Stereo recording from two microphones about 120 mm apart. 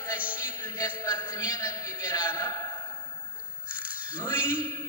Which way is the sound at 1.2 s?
20° left (ahead or behind).